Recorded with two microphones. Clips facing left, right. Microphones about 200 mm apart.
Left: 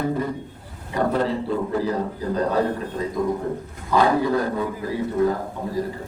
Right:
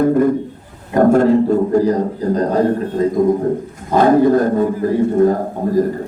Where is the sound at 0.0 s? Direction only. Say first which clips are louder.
Right 11 dB; 50° right (ahead or behind).